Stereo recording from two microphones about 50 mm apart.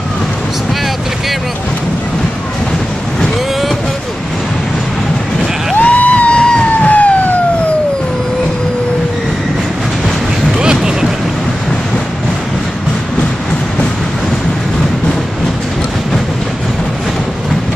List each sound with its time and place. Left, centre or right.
5.8 s music: left
6.8 s emergency vehicle: left
10.6 s a sound: centre